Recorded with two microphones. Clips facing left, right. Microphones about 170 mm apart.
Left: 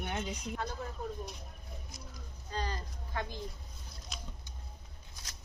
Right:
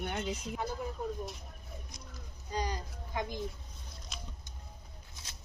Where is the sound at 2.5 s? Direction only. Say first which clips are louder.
Right 2 dB; 15° right (ahead or behind).